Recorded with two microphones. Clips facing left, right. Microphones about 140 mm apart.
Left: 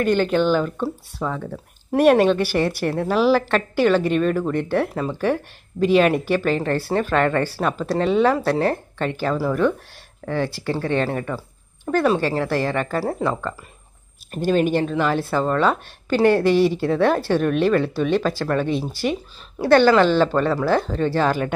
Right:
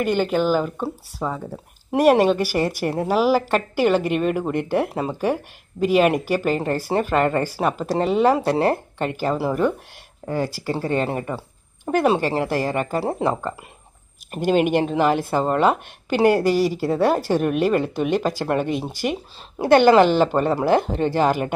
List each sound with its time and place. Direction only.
0.0 s speech: 10° right (ahead or behind)